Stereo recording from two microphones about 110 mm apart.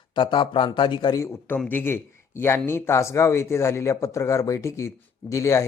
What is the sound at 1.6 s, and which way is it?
Speech, 20° left (ahead or behind).